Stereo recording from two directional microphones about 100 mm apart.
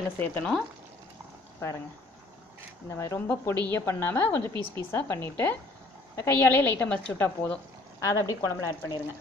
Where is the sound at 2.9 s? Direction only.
30° left (ahead or behind).